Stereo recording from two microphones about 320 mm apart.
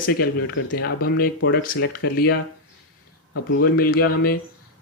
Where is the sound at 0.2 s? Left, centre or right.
Left.